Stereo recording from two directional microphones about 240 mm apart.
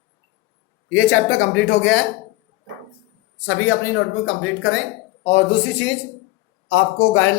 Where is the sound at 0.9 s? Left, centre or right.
Left.